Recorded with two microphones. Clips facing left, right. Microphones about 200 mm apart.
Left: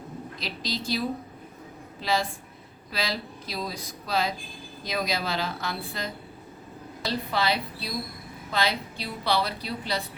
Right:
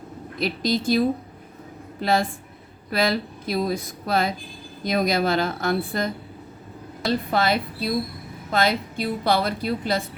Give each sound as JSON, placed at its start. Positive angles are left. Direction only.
{"t": 0.3, "sound": "a woman's voice", "side_deg": -55}